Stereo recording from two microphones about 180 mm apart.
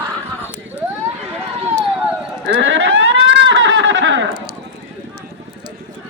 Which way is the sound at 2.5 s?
90° right.